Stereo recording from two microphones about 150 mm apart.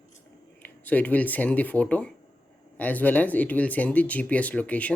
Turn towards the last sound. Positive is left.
turn(degrees=10)  # may be behind; listen again after turning